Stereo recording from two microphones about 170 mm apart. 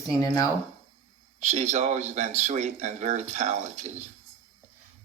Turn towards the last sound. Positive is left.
turn(degrees=-40)  # may be behind; listen again after turning